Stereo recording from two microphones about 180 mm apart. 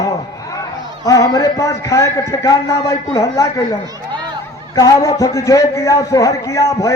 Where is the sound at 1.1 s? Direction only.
20° left (ahead or behind).